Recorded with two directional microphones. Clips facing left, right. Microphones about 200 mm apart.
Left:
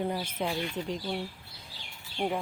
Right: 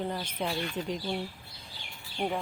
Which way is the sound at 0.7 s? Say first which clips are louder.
Even; 5° right (ahead or behind).